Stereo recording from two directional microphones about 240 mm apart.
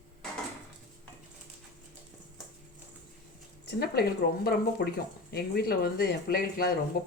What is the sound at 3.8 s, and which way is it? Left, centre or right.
Speech, left.